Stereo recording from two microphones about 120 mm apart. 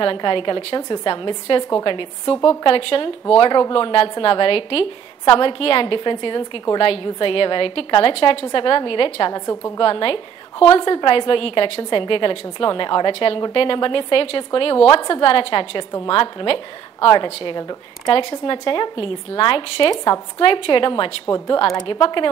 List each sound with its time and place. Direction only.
0.0 s a woman's voice: 45° left (ahead or behind)
0.7 s a woman's voice: 35° left (ahead or behind)
9.3 s a woman's voice: 25° left (ahead or behind)
9.8 s a woman's voice: 45° left (ahead or behind)